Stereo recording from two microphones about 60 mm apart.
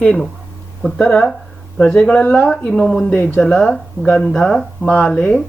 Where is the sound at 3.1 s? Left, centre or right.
Left.